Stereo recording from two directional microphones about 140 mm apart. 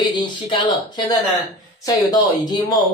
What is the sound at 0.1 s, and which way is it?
Speech, 35° left (ahead or behind).